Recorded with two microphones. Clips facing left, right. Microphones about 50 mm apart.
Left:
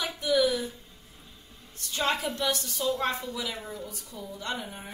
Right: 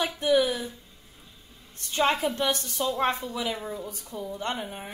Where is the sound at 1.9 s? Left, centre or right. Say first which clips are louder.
Right 4 dB; right.